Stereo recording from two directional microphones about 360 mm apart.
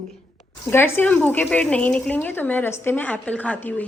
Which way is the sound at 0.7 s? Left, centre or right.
Centre.